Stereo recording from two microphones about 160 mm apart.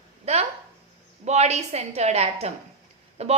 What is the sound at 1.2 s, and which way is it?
A woman's voice, 45° right (ahead or behind).